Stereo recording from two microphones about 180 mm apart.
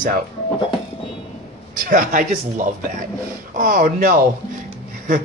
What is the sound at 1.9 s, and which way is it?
Speech, 50° right (ahead or behind).